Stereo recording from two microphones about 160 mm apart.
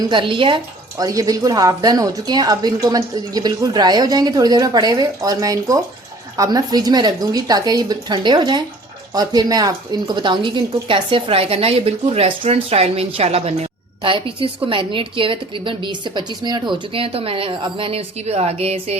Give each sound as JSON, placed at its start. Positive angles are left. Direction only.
{"t": 0.0, "sound": "a woman's voice", "side_deg": -30}